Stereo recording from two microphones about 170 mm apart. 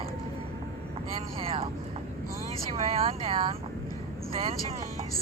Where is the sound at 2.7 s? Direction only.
35° right (ahead or behind).